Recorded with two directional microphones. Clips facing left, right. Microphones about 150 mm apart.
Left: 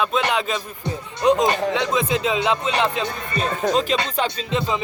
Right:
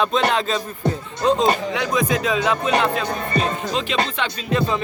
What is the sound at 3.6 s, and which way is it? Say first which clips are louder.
Speech: left 2 dB; 40° left (ahead or behind).